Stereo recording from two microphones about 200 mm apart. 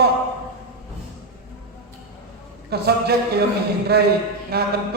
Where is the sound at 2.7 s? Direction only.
55° right (ahead or behind).